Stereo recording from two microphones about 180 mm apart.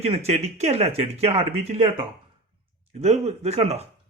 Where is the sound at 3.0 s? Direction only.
35° right (ahead or behind).